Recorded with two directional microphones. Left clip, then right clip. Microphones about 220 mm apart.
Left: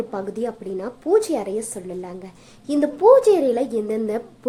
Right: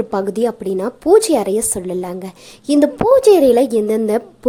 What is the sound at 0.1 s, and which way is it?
A woman's voice, 40° right (ahead or behind).